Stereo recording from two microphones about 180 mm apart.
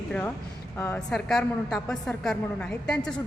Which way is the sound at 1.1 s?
Centre (ahead or behind).